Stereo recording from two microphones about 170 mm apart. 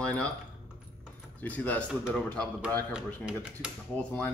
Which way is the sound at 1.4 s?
10° left (ahead or behind).